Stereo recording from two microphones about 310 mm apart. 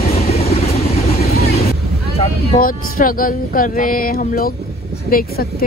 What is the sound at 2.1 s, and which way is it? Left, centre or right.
Speech, left.